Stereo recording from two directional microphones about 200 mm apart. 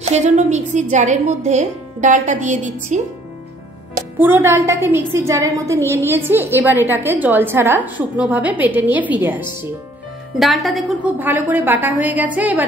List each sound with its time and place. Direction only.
0.0 s a woman's voice: 35° right (ahead or behind)
4.2 s a woman's voice: 10° right (ahead or behind)